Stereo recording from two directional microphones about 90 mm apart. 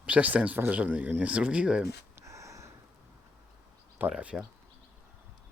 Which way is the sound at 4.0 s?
15° right (ahead or behind).